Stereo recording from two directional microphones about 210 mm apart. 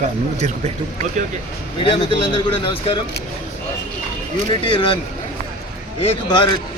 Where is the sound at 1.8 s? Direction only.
25° left (ahead or behind).